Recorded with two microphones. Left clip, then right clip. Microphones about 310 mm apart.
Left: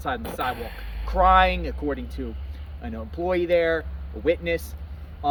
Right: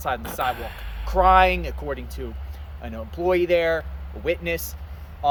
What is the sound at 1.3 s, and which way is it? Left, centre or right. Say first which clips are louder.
Speech: right 2 dB; centre.